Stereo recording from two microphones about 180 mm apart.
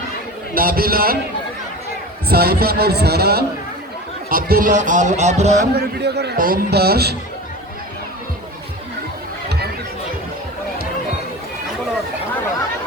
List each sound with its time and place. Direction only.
0.5 s a man's voice: 55° right (ahead or behind)
2.3 s a man's voice: 60° right (ahead or behind); by 5.6 s 40° right (ahead or behind)
5.7 s a man's voice: 65° right (ahead or behind)